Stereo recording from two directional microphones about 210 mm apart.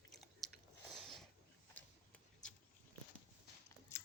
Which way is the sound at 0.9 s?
Centre (ahead or behind).